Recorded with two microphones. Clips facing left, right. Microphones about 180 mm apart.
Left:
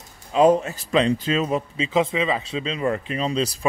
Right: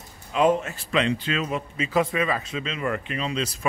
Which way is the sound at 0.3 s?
35° left (ahead or behind).